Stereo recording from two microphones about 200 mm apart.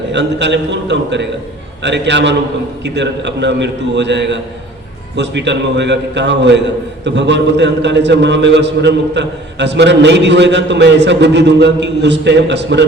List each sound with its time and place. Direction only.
0.1 s a man's voice: 60° right (ahead or behind)